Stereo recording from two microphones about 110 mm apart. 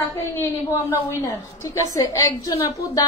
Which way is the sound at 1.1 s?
25° left (ahead or behind).